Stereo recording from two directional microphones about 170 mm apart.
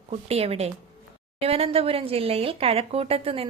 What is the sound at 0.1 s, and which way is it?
A woman's voice, 35° right (ahead or behind).